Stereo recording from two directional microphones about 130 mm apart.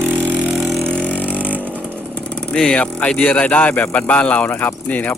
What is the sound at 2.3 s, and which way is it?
Speech, 5° left (ahead or behind).